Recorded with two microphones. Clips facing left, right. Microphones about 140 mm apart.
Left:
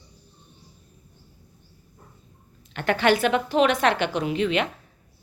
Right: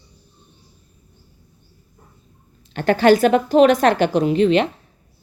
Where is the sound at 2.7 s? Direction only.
35° right (ahead or behind).